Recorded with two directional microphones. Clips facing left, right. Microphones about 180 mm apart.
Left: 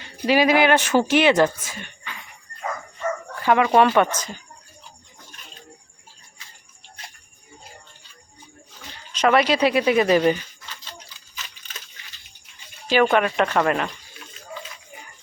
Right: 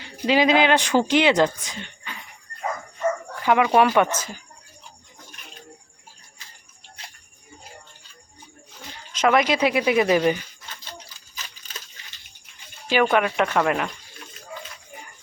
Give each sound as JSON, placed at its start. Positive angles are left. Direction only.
{"t": 0.0, "sound": "speech", "side_deg": -20}
{"t": 3.4, "sound": "speech", "side_deg": -15}
{"t": 9.2, "sound": "speech", "side_deg": -15}
{"t": 12.9, "sound": "speech", "side_deg": -10}